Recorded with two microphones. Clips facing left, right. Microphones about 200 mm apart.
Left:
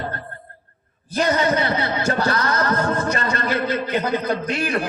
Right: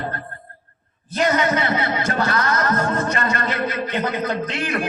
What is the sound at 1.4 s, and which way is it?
A man's voice, 30° left (ahead or behind).